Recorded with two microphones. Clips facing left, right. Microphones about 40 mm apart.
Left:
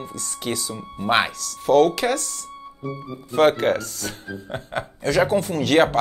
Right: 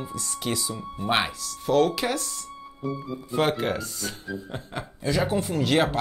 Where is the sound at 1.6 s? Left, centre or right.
Left.